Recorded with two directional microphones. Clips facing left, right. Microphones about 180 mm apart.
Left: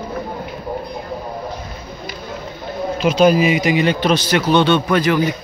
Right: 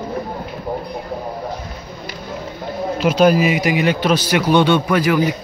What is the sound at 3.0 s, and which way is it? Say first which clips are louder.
A man's voice: even; 5° right (ahead or behind).